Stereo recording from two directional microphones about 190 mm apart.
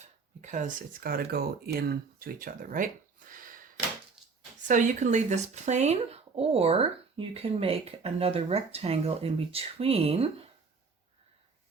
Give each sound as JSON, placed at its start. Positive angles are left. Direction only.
{"t": 0.4, "sound": "speech", "side_deg": -40}
{"t": 4.7, "sound": "speech", "side_deg": -40}